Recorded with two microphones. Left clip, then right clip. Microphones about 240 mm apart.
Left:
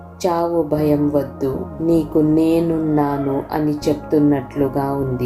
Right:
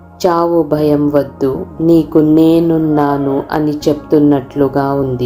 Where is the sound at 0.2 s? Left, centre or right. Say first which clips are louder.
Right 6 dB; centre.